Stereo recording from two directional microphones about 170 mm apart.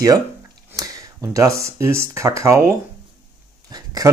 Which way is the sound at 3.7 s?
20° right (ahead or behind).